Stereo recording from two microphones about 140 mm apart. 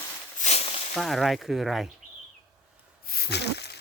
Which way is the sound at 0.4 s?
45° left (ahead or behind).